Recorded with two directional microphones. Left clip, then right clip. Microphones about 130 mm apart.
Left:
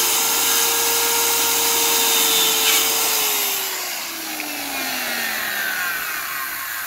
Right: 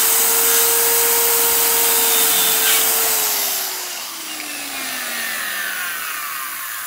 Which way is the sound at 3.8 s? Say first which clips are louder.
Left 1 dB; 25° left (ahead or behind).